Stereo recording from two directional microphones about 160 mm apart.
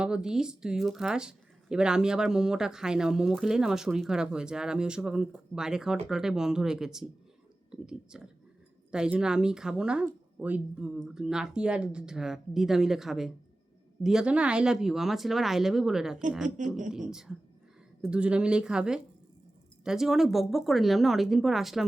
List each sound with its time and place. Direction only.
0.0 s speech: 5° right (ahead or behind)
16.6 s speech: 50° right (ahead or behind)
17.1 s speech: 5° right (ahead or behind)